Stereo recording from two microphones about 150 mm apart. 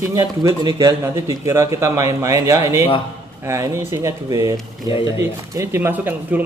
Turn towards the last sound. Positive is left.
turn(degrees=-10)  # may be behind; listen again after turning